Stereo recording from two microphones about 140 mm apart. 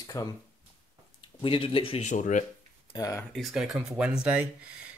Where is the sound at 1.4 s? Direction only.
40° left (ahead or behind).